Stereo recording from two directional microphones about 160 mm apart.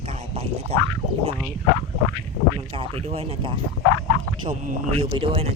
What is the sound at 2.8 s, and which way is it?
Speech, 40° right (ahead or behind).